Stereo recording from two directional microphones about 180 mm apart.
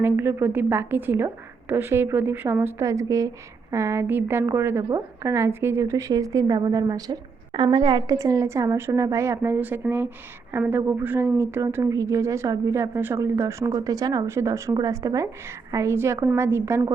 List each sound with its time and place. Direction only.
0.0 s speech: 15° right (ahead or behind)